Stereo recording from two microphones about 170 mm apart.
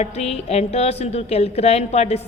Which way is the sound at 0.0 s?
40° left (ahead or behind).